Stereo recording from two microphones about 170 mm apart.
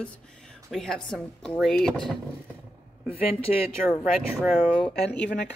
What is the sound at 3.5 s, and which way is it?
Speech, 50° left (ahead or behind).